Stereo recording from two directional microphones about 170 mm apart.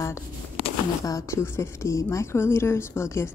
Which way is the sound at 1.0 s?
20° left (ahead or behind).